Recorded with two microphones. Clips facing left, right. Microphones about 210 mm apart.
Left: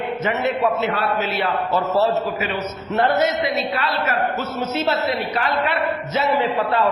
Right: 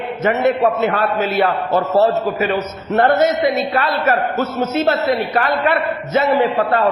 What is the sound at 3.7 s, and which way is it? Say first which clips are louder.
Speech: right 6 dB; 50° right (ahead or behind).